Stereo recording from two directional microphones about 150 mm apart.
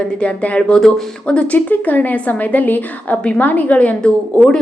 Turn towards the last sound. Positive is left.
turn(degrees=5)  # may be behind; listen again after turning